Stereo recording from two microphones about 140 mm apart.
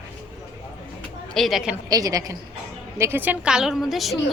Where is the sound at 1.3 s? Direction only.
Centre (ahead or behind).